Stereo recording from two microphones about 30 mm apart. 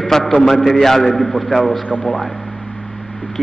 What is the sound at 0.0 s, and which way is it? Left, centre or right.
A man's voice, centre.